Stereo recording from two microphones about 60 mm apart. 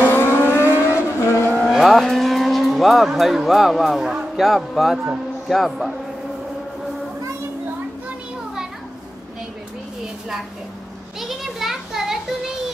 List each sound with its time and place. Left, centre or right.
0.0 s civil defense siren: left
0.8 s vehicle: left
1.7 s cattle: centre
4.1 s music: centre
11.1 s a sound: centre